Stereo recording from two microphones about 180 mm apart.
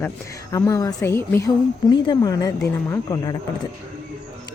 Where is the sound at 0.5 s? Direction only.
20° left (ahead or behind).